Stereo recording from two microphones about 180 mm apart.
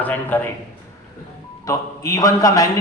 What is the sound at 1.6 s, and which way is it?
A man's voice, 20° left (ahead or behind).